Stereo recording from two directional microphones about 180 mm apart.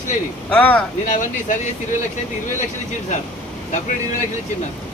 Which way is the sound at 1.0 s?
45° left (ahead or behind).